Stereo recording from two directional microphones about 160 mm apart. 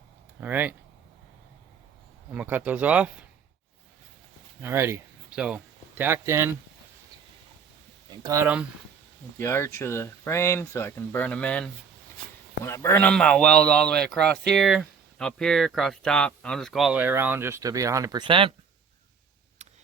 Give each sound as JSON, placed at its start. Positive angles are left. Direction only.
{"t": 0.3, "sound": "speech", "side_deg": -10}
{"t": 2.3, "sound": "speech", "side_deg": -10}
{"t": 4.6, "sound": "speech", "side_deg": -15}
{"t": 8.2, "sound": "speech", "side_deg": -20}
{"t": 9.4, "sound": "a man's voice", "side_deg": 15}